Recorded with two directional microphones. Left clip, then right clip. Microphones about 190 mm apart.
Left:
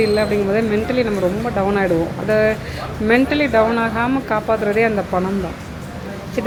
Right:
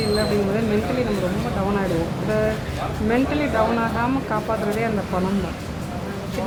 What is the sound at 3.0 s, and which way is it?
A woman's voice, 15° left (ahead or behind).